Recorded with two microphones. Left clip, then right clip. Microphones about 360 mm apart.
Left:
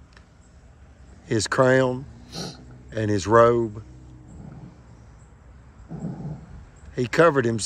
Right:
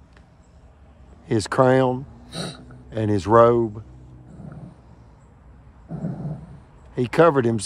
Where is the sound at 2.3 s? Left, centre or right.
Right.